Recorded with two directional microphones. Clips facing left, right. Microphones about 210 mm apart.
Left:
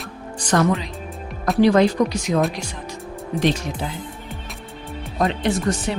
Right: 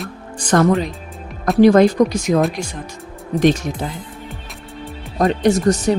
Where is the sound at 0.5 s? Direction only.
50° right (ahead or behind).